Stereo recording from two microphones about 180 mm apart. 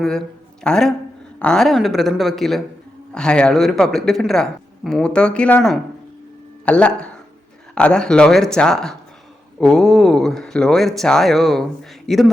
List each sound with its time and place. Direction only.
0.6 s speech: 5° left (ahead or behind)